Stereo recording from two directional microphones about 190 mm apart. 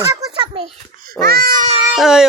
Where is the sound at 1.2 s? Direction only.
50° right (ahead or behind).